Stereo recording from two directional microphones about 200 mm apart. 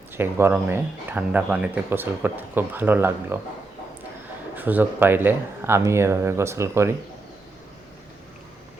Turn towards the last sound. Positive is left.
turn(degrees=-15)  # may be behind; listen again after turning